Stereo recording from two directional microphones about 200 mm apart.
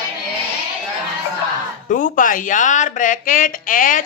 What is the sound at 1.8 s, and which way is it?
Speech, 40° left (ahead or behind).